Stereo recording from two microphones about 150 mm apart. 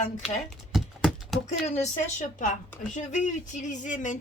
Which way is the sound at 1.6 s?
50° left (ahead or behind).